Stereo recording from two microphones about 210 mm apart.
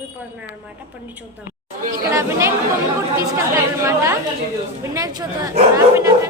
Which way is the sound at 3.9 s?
15° right (ahead or behind).